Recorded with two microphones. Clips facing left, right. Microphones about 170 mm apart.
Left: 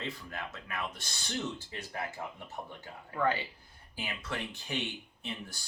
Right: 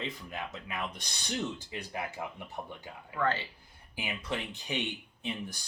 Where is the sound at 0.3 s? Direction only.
15° right (ahead or behind).